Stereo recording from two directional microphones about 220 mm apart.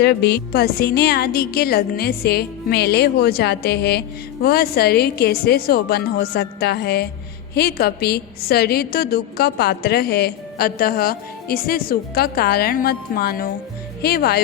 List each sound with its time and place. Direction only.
0.0 s a woman's voice: 50° left (ahead or behind)